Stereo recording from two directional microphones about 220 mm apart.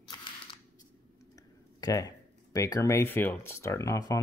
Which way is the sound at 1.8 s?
15° left (ahead or behind).